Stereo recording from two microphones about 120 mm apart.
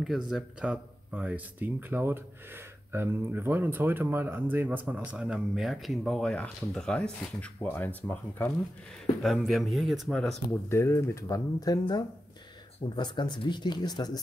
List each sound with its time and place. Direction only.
0.3 s speech: 5° right (ahead or behind); by 8.5 s 15° left (ahead or behind)
9.2 s speech: centre (ahead or behind)
10.5 s speech: 20° left (ahead or behind)
12.9 s speech: 40° left (ahead or behind)